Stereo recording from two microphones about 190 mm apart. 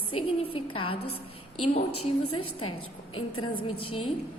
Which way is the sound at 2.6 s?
25° left (ahead or behind).